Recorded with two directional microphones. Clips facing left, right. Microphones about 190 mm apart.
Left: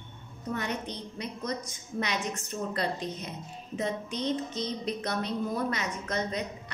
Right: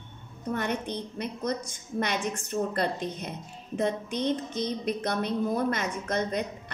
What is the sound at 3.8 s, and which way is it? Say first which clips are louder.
A woman's voice: right 4 dB; 55° right (ahead or behind).